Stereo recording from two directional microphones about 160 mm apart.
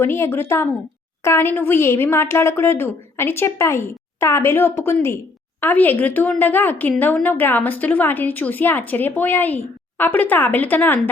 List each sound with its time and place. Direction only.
0.0 s a woman's voice: 15° left (ahead or behind)